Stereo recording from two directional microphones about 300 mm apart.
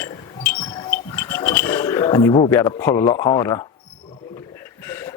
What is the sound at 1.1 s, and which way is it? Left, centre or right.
Speech, centre.